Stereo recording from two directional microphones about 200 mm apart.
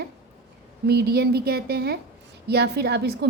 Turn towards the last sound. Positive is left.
turn(degrees=-55)  # may be behind; listen again after turning